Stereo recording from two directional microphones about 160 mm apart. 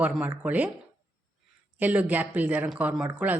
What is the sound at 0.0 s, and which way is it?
Speech, 10° right (ahead or behind).